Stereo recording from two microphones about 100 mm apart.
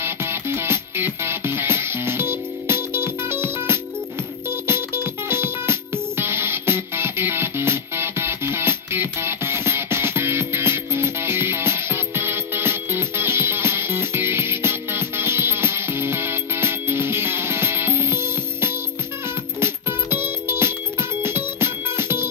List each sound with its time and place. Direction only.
0.0 s music: 25° right (ahead or behind)